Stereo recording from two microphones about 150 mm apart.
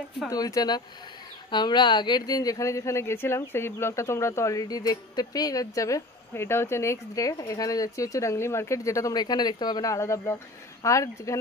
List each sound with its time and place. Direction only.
0.3 s speech: 25° left (ahead or behind)